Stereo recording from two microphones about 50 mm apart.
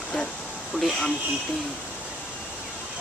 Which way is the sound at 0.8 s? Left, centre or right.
Centre.